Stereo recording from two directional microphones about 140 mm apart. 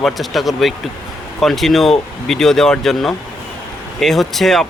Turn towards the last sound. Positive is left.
turn(degrees=0)  # may be behind; listen again after turning